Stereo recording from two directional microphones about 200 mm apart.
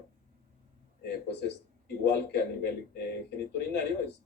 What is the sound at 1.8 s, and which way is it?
A man's voice, 55° left (ahead or behind).